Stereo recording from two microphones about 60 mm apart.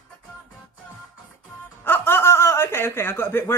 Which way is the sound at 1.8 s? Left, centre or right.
Left.